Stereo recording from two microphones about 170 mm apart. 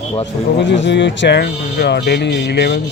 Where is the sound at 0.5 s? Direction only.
90° left.